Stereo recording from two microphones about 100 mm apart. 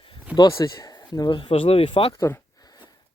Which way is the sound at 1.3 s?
55° left (ahead or behind).